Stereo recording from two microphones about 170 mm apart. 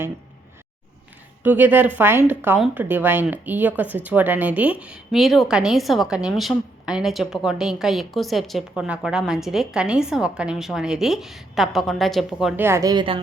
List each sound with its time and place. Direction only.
1.5 s speech: 10° right (ahead or behind)
12.6 s a woman's voice: 20° right (ahead or behind)